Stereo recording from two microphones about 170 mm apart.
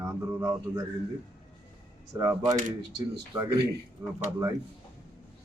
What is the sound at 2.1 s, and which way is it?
Speech, 20° right (ahead or behind).